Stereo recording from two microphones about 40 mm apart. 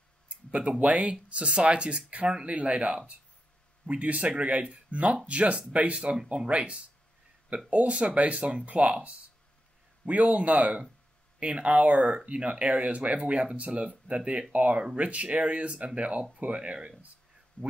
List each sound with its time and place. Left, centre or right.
0.3 s a sound: right
0.8 s speech: right
10.0 s speech: right
17.6 s speech: left